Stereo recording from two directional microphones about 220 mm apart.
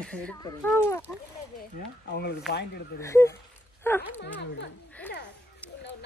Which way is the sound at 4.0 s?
50° left (ahead or behind).